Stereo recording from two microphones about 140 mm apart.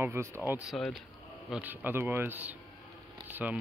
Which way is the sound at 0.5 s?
5° right (ahead or behind).